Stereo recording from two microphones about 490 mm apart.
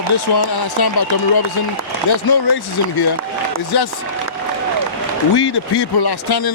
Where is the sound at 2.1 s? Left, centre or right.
Left.